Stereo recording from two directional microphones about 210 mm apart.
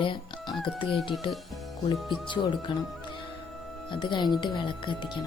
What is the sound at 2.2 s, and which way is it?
Speech, 20° left (ahead or behind).